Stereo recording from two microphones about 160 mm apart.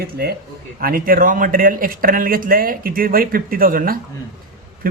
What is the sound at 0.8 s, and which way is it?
Speech, 65° right (ahead or behind).